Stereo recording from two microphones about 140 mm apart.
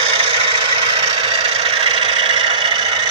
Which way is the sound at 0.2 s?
40° right (ahead or behind).